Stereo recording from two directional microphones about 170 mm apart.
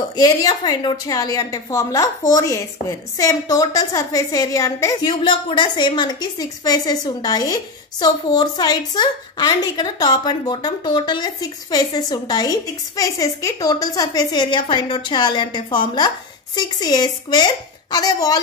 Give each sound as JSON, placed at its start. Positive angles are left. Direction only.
{"t": 0.1, "sound": "a woman's voice", "side_deg": 25}